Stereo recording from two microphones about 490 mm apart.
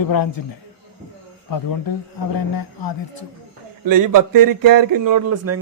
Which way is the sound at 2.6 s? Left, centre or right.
Left.